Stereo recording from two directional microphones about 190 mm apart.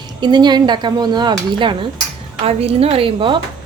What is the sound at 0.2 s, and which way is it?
A woman's voice, 25° right (ahead or behind).